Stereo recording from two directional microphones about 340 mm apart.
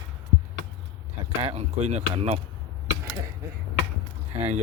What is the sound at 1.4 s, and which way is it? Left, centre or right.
Speech, centre.